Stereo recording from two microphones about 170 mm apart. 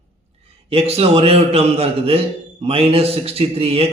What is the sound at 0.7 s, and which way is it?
A man's voice, 35° right (ahead or behind).